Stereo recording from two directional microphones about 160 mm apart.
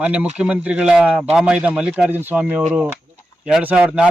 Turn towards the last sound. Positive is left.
turn(degrees=-5)  # may be behind; listen again after turning